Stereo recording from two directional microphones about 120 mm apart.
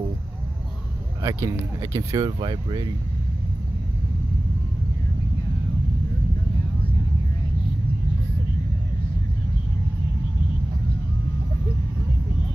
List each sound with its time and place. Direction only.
1.2 s speech: 25° right (ahead or behind)